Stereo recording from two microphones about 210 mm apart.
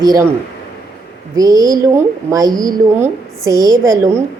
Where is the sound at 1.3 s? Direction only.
15° right (ahead or behind).